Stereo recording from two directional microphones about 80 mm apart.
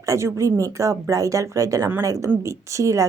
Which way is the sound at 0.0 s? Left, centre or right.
Right.